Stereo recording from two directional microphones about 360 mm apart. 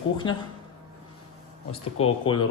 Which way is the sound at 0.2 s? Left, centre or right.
Centre.